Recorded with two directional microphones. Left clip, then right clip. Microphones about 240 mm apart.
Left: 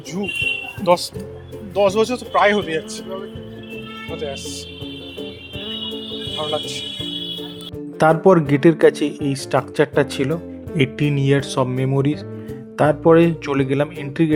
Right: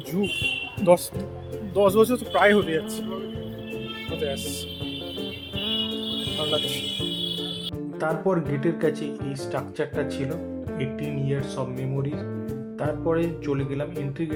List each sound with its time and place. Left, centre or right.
0.8 s speech: centre
7.9 s speech: left